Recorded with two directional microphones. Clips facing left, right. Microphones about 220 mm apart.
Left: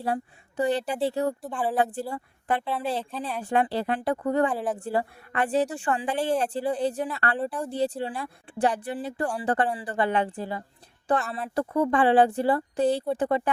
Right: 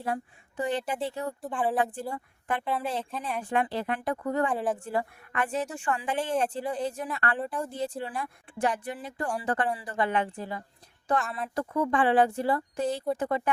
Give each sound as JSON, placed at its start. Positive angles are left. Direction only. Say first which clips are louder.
{"t": 0.0, "sound": "a woman's voice", "louder": "left 3 dB", "side_deg": 35}
{"t": 1.5, "sound": "speech", "louder": "right 4 dB", "side_deg": 0}
{"t": 1.8, "sound": "a woman's voice", "louder": "left 3 dB", "side_deg": 35}
{"t": 4.5, "sound": "speech", "louder": "even", "side_deg": 0}
{"t": 4.8, "sound": "a woman's voice", "louder": "left 3 dB", "side_deg": 35}